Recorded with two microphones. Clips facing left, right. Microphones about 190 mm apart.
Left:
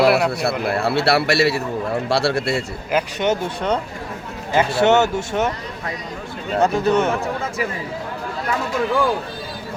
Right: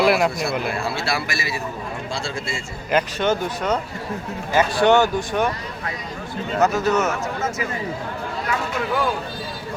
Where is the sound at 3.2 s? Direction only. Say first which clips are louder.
Left 1 dB; 25° left (ahead or behind).